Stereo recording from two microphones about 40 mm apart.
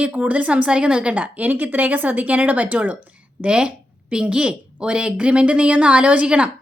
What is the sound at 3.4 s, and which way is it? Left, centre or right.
A woman's voice, right.